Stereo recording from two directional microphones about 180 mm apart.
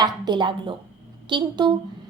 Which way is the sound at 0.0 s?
25° right (ahead or behind).